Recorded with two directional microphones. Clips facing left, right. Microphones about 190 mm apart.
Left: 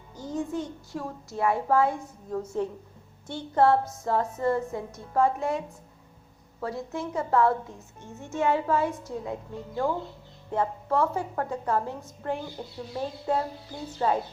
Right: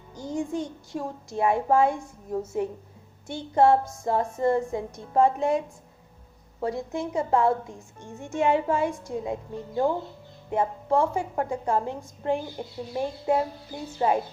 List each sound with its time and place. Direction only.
0.2 s a woman's voice: 15° right (ahead or behind)
6.6 s a woman's voice: 20° right (ahead or behind)